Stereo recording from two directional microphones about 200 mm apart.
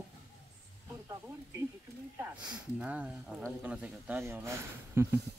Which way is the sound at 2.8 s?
5° right (ahead or behind).